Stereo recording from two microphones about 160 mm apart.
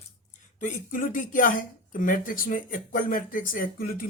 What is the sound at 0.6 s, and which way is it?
Speech, 60° left (ahead or behind).